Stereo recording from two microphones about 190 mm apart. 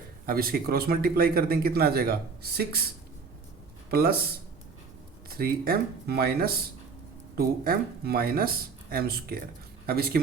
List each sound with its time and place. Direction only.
0.3 s speech: 50° right (ahead or behind)
5.3 s speech: 50° right (ahead or behind)